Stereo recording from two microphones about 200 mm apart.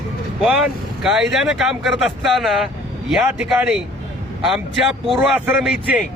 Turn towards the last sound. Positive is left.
turn(degrees=-5)  # may be behind; listen again after turning